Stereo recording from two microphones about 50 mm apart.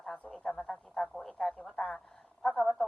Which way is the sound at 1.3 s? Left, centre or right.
Left.